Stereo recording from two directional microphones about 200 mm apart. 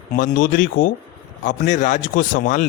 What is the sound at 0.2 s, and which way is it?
A man's voice, 40° left (ahead or behind).